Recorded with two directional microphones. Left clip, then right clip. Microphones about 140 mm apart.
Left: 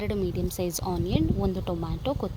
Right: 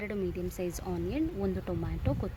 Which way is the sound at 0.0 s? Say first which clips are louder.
Left 5 dB; 25° left (ahead or behind).